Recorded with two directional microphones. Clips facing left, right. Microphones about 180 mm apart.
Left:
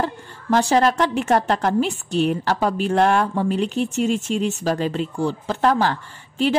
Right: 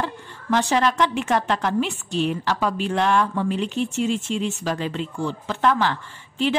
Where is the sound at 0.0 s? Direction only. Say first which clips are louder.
Left 4 dB; 40° left (ahead or behind).